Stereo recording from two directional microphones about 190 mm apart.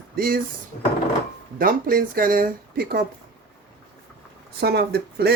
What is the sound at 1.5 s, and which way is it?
Speech, 50° right (ahead or behind).